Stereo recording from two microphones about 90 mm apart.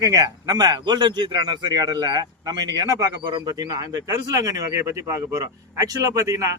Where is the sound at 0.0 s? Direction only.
40° right (ahead or behind).